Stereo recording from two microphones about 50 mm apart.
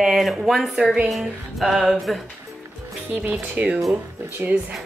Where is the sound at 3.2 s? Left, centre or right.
Right.